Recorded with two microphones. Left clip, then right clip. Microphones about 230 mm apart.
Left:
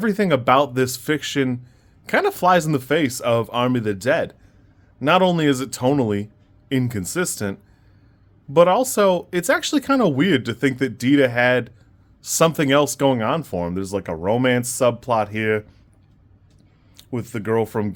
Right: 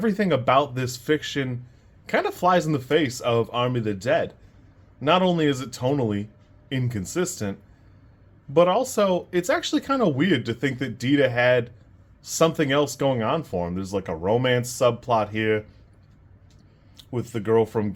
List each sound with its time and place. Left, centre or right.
0.0 s speech: left
17.0 s speech: left